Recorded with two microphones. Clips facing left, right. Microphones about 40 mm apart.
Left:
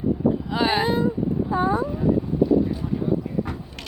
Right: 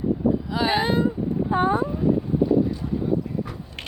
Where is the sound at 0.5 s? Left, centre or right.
Left.